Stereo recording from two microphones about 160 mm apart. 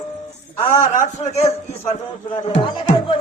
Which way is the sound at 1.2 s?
45° left (ahead or behind).